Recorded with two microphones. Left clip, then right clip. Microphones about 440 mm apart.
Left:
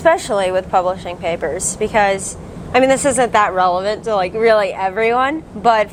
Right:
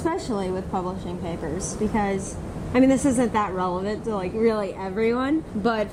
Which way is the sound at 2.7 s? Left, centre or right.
Left.